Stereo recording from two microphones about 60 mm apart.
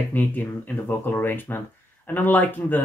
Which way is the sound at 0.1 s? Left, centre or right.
Left.